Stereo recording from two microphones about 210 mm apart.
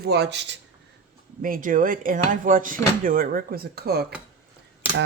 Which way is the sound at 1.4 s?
40° right (ahead or behind).